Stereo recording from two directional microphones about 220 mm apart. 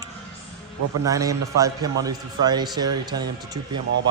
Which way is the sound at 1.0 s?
15° right (ahead or behind).